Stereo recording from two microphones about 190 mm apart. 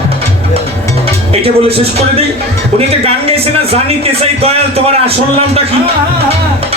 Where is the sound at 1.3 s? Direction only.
30° right (ahead or behind).